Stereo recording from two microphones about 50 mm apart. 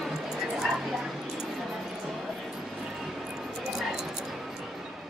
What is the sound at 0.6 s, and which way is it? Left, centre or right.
Bow-wow, centre.